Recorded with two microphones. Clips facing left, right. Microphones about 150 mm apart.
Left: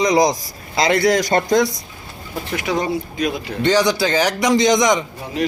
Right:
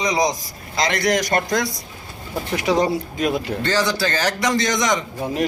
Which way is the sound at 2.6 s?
35° right (ahead or behind).